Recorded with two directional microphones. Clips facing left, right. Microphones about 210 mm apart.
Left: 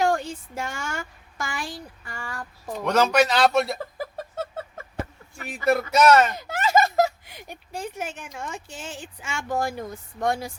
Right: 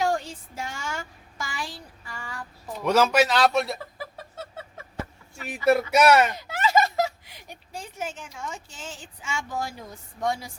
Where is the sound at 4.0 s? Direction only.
45° left (ahead or behind).